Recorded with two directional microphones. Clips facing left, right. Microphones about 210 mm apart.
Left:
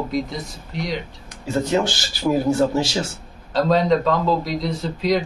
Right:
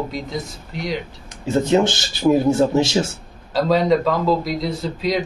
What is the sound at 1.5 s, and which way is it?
A man's voice, 25° right (ahead or behind).